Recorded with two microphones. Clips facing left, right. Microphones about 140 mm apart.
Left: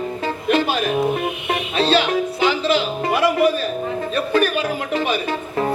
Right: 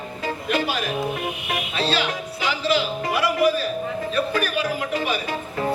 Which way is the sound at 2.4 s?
25° left (ahead or behind).